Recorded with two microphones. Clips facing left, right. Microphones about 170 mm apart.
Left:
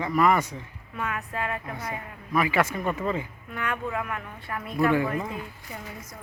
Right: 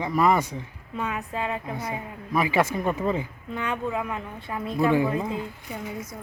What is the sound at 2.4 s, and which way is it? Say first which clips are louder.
Speech: right 1 dB; 30° right (ahead or behind).